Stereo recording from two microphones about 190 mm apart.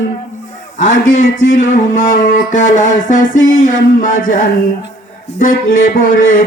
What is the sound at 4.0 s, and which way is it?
Speech, 45° left (ahead or behind).